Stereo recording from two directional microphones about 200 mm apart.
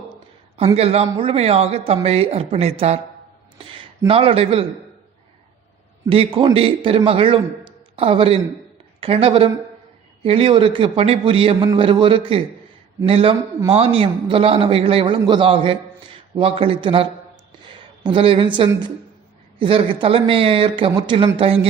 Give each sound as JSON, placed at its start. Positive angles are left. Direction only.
{"t": 0.8, "sound": "a man's voice", "side_deg": -30}
{"t": 6.1, "sound": "a man's voice", "side_deg": -25}